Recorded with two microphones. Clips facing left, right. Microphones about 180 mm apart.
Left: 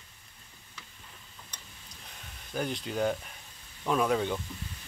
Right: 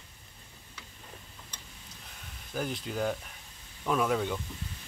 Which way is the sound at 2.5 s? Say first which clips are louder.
Left 1 dB; 5° right (ahead or behind).